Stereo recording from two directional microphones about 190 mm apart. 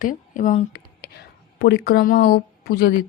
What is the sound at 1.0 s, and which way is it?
Speech, 55° left (ahead or behind).